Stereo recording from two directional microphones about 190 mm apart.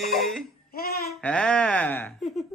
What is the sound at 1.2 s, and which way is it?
Speech, 5° left (ahead or behind).